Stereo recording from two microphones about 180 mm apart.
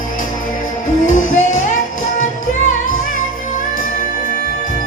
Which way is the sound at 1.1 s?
45° left (ahead or behind).